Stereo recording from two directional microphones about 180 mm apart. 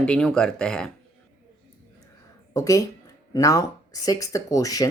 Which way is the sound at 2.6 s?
20° left (ahead or behind).